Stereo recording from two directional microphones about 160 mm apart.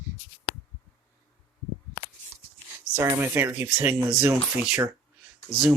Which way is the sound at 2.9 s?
15° right (ahead or behind).